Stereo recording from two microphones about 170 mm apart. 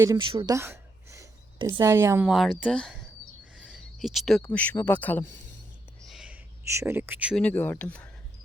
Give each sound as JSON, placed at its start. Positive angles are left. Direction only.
{"t": 0.0, "sound": "a woman's voice", "side_deg": -25}
{"t": 0.5, "sound": "a sound", "side_deg": -15}
{"t": 1.8, "sound": "a woman's voice", "side_deg": -15}
{"t": 2.3, "sound": "speech", "side_deg": 0}
{"t": 6.1, "sound": "a sound", "side_deg": -5}
{"t": 7.3, "sound": "speech", "side_deg": 10}